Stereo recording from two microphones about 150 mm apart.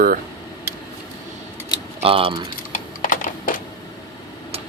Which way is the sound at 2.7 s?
65° left (ahead or behind).